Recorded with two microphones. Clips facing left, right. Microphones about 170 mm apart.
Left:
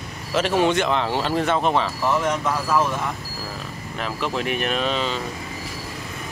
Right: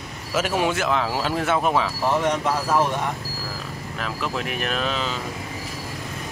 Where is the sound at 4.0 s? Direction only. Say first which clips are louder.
Left 2 dB; centre (ahead or behind).